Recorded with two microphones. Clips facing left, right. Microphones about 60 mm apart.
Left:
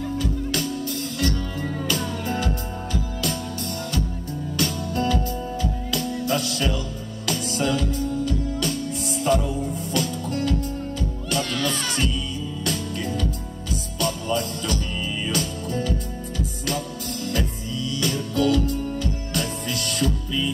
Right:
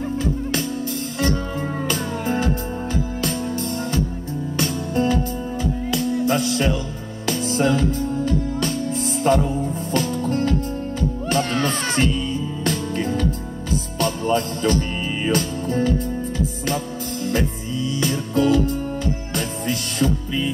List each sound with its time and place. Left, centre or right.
0.2 s music: right
4.6 s music: right